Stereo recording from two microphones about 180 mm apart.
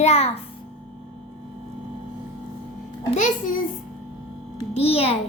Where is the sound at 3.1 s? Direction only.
45° left (ahead or behind).